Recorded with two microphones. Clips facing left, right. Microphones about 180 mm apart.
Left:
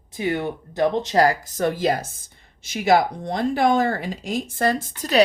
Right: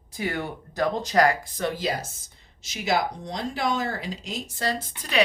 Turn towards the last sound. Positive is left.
turn(degrees=45)  # may be behind; listen again after turning